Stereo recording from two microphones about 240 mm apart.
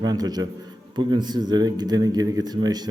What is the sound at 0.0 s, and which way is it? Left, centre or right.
Speech, centre.